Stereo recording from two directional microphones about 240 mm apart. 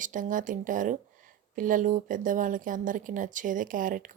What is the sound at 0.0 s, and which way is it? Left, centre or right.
Speech, right.